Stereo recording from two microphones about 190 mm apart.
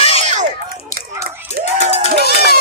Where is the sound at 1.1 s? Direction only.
15° right (ahead or behind).